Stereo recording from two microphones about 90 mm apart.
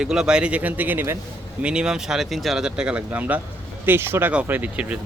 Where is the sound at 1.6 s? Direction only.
10° right (ahead or behind).